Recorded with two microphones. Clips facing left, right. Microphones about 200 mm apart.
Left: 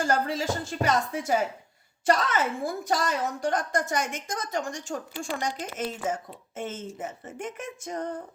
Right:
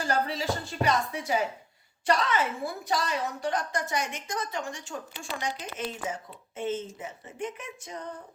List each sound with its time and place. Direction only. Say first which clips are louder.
0.0 s a woman's voice: left 2 dB; 50° left (ahead or behind)